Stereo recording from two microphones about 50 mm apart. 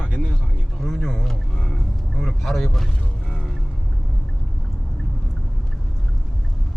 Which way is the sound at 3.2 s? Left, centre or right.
Centre.